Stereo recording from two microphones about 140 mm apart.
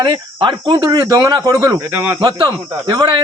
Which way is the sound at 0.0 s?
35° right (ahead or behind).